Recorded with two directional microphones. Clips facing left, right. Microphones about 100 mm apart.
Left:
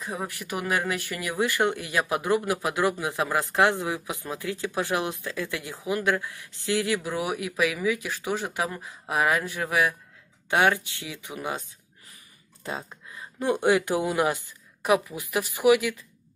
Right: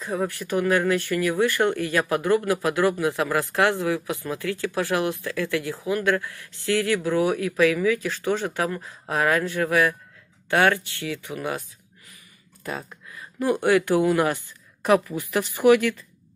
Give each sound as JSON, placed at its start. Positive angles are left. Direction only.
{"t": 0.0, "sound": "speech", "side_deg": 15}
{"t": 12.6, "sound": "speech", "side_deg": 20}